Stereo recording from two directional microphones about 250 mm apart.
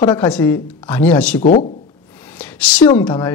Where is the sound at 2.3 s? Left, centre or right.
Centre.